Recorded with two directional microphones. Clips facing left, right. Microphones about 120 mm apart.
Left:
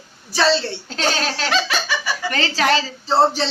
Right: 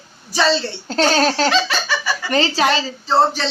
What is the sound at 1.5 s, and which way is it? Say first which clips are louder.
Laughter: right 2 dB; 10° left (ahead or behind).